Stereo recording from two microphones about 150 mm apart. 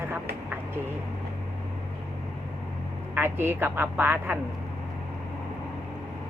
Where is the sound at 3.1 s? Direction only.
15° right (ahead or behind).